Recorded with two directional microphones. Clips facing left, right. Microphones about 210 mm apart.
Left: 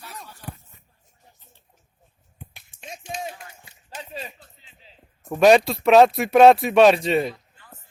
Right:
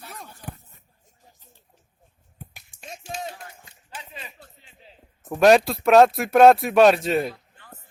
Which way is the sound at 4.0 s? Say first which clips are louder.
Left 6 dB; 35° left (ahead or behind).